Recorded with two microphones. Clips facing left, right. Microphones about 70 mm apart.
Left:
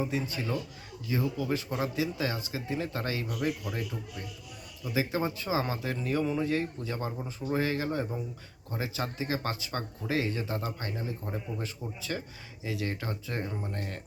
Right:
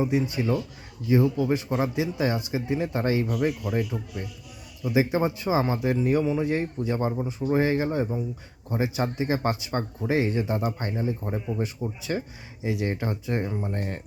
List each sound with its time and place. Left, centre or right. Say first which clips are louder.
0.0 s speech: right 7 dB; right
6.5 s speech: right 5 dB; right